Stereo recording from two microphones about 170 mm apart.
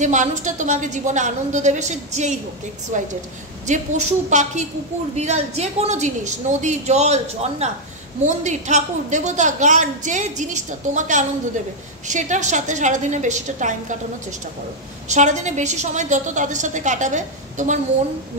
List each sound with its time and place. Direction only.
0.0 s a woman's voice: 45° right (ahead or behind)
15.0 s a woman's voice: 45° right (ahead or behind)